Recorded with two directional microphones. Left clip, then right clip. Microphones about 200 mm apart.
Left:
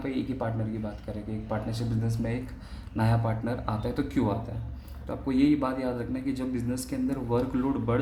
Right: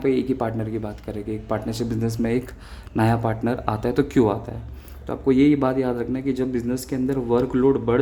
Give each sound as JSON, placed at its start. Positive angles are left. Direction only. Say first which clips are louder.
{"t": 0.0, "sound": "a man's voice", "louder": "right 10 dB", "side_deg": -45}